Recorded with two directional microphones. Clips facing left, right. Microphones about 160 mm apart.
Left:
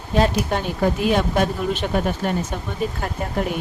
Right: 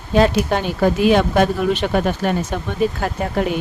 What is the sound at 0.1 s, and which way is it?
Speech, 90° right.